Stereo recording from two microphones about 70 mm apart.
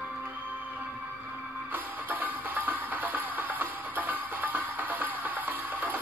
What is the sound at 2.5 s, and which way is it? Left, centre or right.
Music, right.